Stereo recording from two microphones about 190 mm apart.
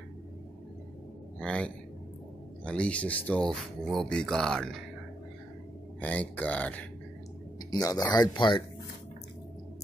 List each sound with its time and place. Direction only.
1.4 s speech: 5° left (ahead or behind)
5.9 s speech: 10° left (ahead or behind)
7.7 s speech: 20° left (ahead or behind)